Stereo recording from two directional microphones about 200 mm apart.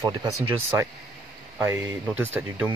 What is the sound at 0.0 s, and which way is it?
Speech, 20° right (ahead or behind).